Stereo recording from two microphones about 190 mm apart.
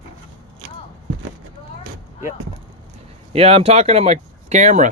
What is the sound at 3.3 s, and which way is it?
Speech, 30° right (ahead or behind).